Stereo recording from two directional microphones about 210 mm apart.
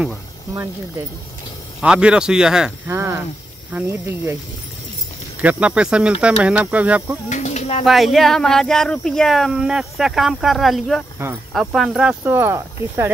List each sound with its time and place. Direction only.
1.8 s speech: 5° right (ahead or behind)
5.4 s speech: 5° right (ahead or behind)
7.2 s a sound: 35° left (ahead or behind)
7.8 s speech: centre (ahead or behind)